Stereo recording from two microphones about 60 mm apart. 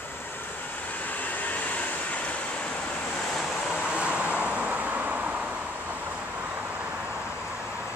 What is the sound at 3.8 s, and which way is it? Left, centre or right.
Vehicle, centre.